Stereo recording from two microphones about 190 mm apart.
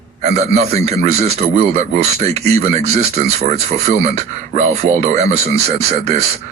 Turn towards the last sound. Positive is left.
turn(degrees=-35)  # may be behind; listen again after turning